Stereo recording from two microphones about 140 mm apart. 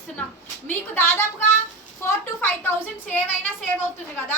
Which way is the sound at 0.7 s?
15° left (ahead or behind).